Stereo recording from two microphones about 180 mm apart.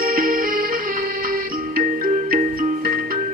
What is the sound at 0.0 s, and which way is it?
Music, 50° right (ahead or behind).